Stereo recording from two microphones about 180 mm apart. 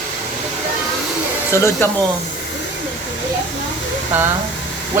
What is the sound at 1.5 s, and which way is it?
Speech, 15° left (ahead or behind).